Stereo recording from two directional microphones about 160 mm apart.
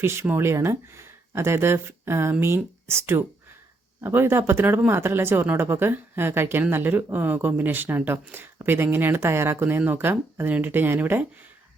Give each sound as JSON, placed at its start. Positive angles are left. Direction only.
{"t": 0.0, "sound": "speech", "side_deg": -15}